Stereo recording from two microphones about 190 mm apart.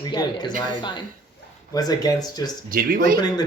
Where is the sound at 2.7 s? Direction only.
50° right (ahead or behind).